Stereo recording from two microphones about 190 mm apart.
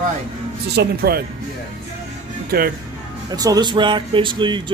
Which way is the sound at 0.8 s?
55° right (ahead or behind).